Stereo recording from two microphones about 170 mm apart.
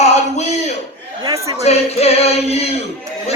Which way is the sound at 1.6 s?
40° left (ahead or behind).